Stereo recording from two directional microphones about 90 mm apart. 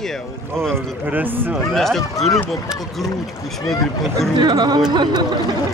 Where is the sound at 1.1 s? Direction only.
20° right (ahead or behind).